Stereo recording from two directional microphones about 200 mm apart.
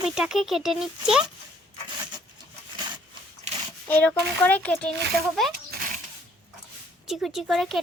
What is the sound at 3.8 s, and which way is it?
Speech, 10° left (ahead or behind).